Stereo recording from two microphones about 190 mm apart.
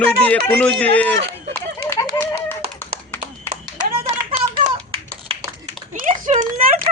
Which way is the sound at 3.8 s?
35° right (ahead or behind).